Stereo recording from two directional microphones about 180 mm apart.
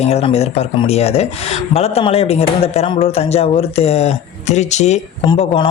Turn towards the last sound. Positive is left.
turn(degrees=30)  # may be behind; listen again after turning